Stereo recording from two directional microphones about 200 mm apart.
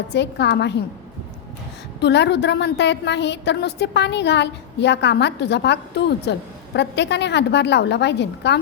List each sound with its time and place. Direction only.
0.1 s a woman's voice: 60° left (ahead or behind)
2.0 s a woman's voice: 60° left (ahead or behind)